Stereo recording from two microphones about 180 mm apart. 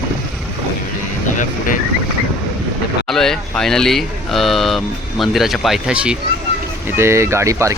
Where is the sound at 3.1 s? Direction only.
5° left (ahead or behind).